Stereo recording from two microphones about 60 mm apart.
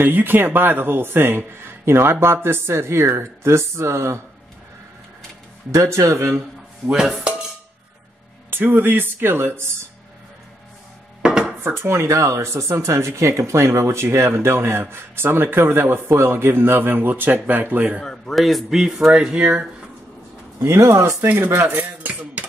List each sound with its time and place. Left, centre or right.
0.0 s a man's voice: right
5.7 s speech: right
6.9 s a man's voice: centre
8.5 s a man's voice: right
11.2 s dishes: centre
11.9 s a man's voice: right
18.0 s a sound: centre
18.3 s a man's voice: centre
20.8 s speech: right
21.6 s cutlery: right